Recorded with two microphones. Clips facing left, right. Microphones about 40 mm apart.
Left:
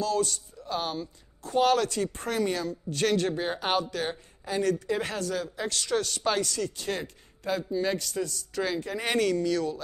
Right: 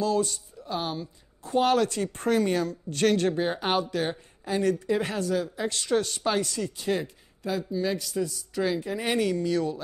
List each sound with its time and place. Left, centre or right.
0.0 s speech: right
0.7 s a woman's voice: centre
1.4 s a woman's voice: right
3.3 s a woman's voice: centre
4.5 s a woman's voice: right
5.7 s speech: right
7.0 s a man's voice: centre
8.0 s a woman's voice: centre
9.2 s speech: right